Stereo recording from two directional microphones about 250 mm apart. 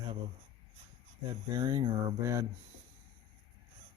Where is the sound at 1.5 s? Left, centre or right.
Centre.